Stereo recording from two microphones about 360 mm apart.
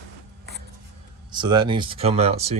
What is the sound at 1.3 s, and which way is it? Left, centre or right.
Speech, centre.